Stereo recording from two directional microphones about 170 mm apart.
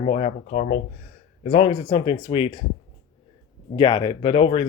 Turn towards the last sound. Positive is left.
turn(degrees=35)  # may be behind; listen again after turning